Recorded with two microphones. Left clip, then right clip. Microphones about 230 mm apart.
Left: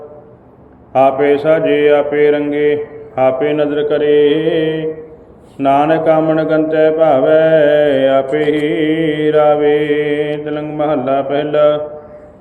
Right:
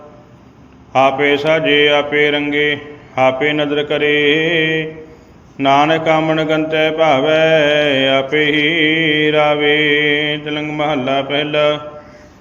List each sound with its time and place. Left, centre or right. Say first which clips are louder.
0.9 s mantra: left 2 dB; right
3.6 s mantra: left 2 dB; right
5.7 s mantra: left 1 dB; right
8.3 s mantra: even; centre
9.9 s mantra: right 1 dB; right